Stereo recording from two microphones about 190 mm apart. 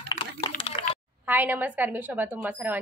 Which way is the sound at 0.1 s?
20° left (ahead or behind).